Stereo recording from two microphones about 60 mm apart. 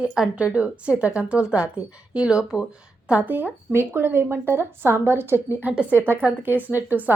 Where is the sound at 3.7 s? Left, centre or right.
Right.